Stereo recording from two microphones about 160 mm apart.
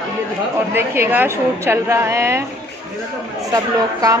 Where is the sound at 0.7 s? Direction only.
15° right (ahead or behind).